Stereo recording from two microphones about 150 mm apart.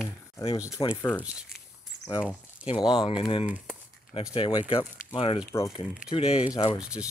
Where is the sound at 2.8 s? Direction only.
30° left (ahead or behind).